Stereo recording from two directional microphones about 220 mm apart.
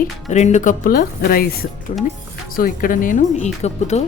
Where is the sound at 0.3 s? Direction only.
30° left (ahead or behind).